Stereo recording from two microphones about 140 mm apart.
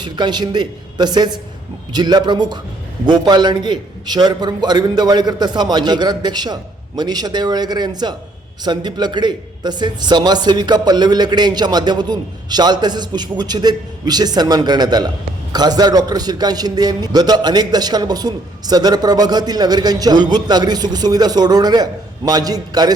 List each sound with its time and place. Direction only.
0.0 s a man's voice: 30° right (ahead or behind)